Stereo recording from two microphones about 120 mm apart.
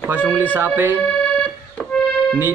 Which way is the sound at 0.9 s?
10° left (ahead or behind).